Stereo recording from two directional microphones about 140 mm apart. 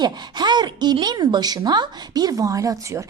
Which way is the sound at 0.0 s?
30° right (ahead or behind).